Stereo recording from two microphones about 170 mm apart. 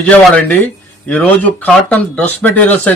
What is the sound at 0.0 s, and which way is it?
Speech, 10° left (ahead or behind).